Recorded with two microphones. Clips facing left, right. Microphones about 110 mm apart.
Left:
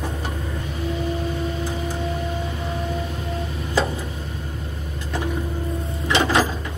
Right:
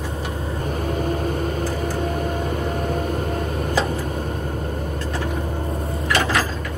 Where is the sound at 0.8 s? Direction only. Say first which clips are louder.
Right 1 dB; 50° right (ahead or behind).